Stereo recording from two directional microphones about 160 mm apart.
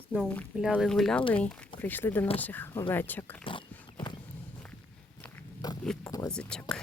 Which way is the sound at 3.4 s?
30° left (ahead or behind).